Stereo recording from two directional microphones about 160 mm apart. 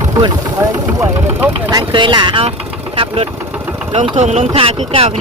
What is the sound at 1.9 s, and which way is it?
Speech, 30° right (ahead or behind).